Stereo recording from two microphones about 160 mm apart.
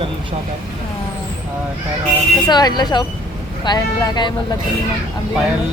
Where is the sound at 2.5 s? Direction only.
25° left (ahead or behind).